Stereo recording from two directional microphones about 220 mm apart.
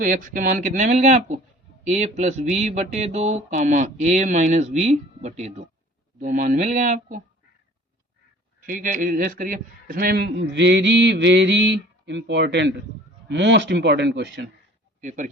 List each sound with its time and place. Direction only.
0.0 s speech: 35° right (ahead or behind)
8.6 s a man's voice: 35° right (ahead or behind)
15.0 s speech: 35° right (ahead or behind)